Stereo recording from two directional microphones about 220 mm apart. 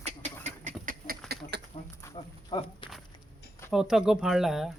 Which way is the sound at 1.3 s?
50° right (ahead or behind).